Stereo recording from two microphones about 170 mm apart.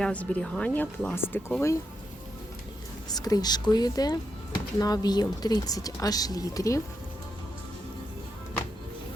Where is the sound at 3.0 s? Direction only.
20° left (ahead or behind).